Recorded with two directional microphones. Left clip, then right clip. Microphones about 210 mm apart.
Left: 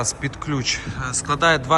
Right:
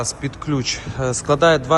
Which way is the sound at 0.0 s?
25° right (ahead or behind).